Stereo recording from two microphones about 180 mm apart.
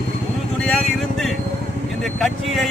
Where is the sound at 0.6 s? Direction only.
5° left (ahead or behind).